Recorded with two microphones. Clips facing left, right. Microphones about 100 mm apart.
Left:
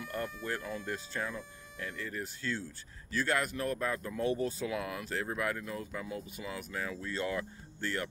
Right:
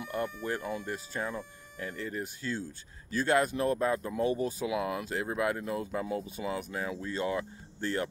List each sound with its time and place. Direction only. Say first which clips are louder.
0.0 s speech: right 4 dB; 15° right (ahead or behind)
4.2 s speech: even; 10° right (ahead or behind)